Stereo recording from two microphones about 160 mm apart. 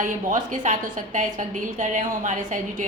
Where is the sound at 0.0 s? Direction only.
55° right (ahead or behind).